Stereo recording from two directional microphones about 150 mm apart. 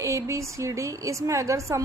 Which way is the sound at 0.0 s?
20° right (ahead or behind).